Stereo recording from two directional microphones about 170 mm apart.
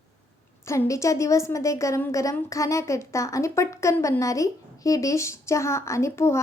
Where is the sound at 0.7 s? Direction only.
15° left (ahead or behind).